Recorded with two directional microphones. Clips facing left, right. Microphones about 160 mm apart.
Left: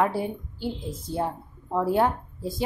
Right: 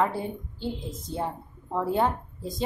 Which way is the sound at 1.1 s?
5° left (ahead or behind).